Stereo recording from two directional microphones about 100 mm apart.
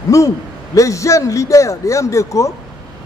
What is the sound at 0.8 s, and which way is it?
A man's voice, 30° left (ahead or behind).